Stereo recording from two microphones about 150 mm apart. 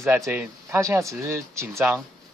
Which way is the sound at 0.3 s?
15° right (ahead or behind).